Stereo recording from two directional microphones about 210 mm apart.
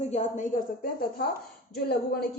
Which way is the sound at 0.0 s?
35° left (ahead or behind).